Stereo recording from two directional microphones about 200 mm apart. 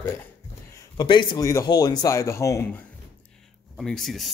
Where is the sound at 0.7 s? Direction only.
20° left (ahead or behind).